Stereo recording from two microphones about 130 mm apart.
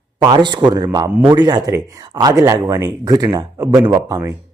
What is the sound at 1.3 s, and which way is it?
Speech, 30° right (ahead or behind).